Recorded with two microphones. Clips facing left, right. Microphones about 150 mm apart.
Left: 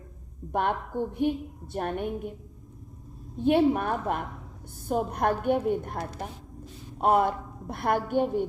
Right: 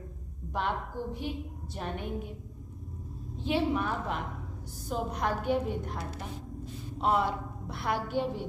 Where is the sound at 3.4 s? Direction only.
55° left (ahead or behind).